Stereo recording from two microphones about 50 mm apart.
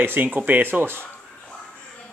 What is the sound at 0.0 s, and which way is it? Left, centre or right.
Speech, right.